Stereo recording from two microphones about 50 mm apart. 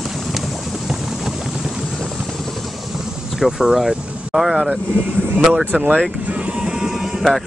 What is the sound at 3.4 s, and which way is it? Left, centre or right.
Speech, centre.